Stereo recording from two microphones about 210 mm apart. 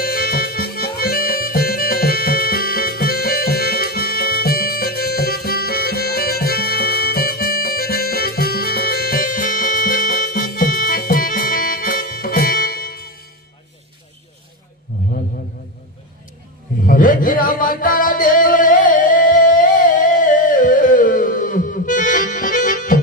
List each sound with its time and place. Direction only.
0.0 s music: 45° left (ahead or behind)
16.8 s music: 40° left (ahead or behind)